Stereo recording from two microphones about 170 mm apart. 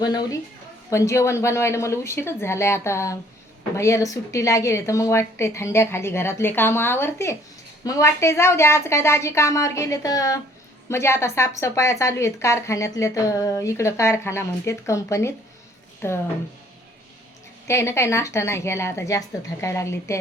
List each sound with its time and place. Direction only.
0.0 s a woman's voice: 20° left (ahead or behind)
17.7 s a woman's voice: 15° left (ahead or behind)